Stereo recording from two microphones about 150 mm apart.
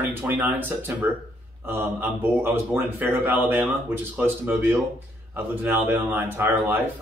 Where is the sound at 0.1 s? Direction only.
10° right (ahead or behind).